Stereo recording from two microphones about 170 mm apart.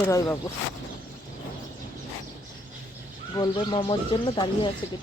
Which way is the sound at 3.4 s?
30° left (ahead or behind).